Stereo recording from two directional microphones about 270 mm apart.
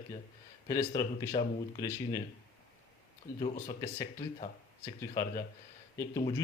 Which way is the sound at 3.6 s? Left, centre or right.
Centre.